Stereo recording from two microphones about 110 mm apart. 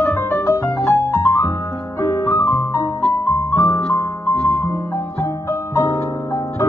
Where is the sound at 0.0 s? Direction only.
25° left (ahead or behind).